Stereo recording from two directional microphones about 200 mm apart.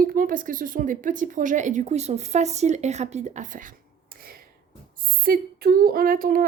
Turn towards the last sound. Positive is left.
turn(degrees=-45)  # may be behind; listen again after turning